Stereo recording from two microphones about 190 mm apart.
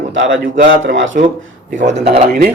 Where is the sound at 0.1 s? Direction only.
80° right.